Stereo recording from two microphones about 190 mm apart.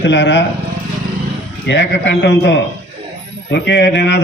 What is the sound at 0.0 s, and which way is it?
Speech, 70° left (ahead or behind).